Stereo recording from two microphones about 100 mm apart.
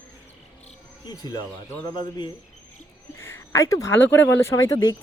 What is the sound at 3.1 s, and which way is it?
Speech, 25° left (ahead or behind).